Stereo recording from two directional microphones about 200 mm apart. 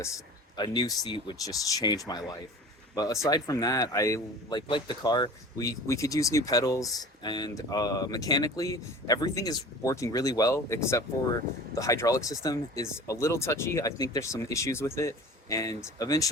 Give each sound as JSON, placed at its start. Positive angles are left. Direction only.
{"t": 0.5, "sound": "speech", "side_deg": 20}